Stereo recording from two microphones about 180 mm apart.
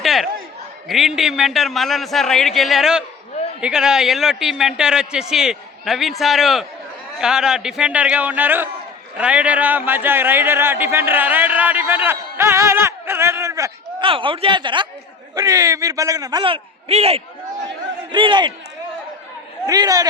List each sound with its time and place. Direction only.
0.0 s a sound: centre (ahead or behind)
0.9 s a man's voice: centre (ahead or behind); by 13.7 s 15° right (ahead or behind)
14.0 s a man's voice: 30° right (ahead or behind)
19.6 s a man's voice: 20° right (ahead or behind)